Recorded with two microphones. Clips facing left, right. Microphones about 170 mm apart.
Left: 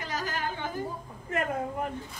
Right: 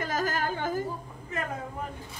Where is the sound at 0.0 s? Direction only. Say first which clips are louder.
Right 5 dB; 45° right (ahead or behind).